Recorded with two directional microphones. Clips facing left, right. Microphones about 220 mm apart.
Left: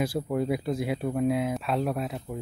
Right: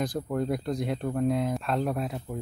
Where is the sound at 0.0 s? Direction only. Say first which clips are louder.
Left 2 dB; 5° left (ahead or behind).